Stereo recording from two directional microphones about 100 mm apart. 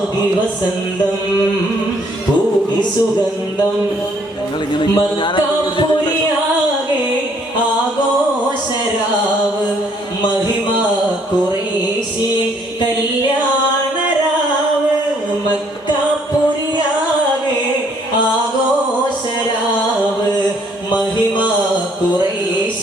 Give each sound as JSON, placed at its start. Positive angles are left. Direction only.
{"t": 4.7, "sound": "music", "side_deg": 55}